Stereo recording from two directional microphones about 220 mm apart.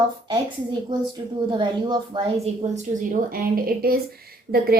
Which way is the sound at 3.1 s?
40° right (ahead or behind).